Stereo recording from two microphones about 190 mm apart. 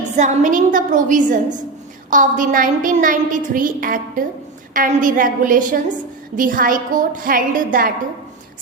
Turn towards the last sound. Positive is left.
turn(degrees=-45)  # may be behind; listen again after turning